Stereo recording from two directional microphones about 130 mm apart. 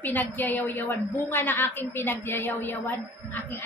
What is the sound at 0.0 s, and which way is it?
A woman's voice, 15° left (ahead or behind).